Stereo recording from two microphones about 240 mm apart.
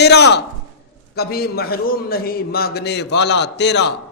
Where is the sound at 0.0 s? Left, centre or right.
Left.